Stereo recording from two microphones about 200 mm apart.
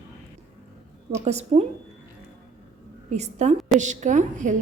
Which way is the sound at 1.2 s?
35° right (ahead or behind).